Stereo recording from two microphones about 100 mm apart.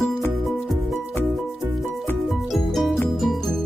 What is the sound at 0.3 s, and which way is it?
Music, centre (ahead or behind).